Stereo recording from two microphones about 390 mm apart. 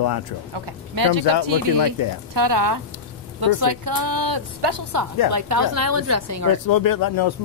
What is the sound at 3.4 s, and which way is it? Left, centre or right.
A woman's voice, right.